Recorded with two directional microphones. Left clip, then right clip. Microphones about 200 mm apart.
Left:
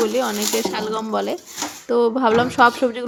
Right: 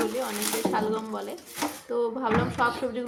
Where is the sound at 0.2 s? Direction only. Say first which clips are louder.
Left 8 dB; 40° left (ahead or behind).